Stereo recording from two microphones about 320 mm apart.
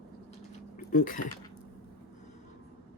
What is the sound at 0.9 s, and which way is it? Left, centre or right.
Speech, left.